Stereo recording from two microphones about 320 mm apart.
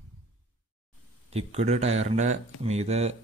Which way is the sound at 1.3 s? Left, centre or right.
Centre.